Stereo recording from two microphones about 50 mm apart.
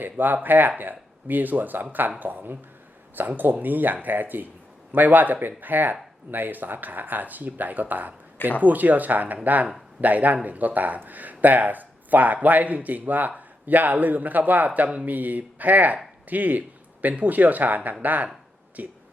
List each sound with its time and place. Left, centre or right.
0.0 s speech: right